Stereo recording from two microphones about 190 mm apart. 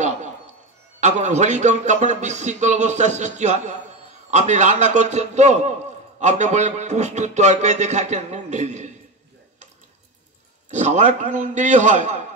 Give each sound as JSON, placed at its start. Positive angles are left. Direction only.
{"t": 1.0, "sound": "speech", "side_deg": -35}
{"t": 10.7, "sound": "speech", "side_deg": -40}